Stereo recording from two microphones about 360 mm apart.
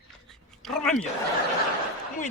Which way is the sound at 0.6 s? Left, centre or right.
Centre.